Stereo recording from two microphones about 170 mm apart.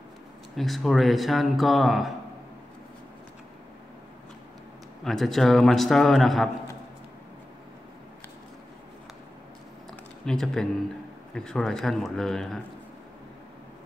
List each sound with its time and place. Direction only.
0.6 s speech: centre (ahead or behind)
5.0 s speech: centre (ahead or behind)
10.2 s speech: 5° left (ahead or behind)